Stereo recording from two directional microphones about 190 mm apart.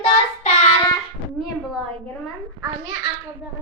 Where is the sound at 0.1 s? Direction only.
35° left (ahead or behind).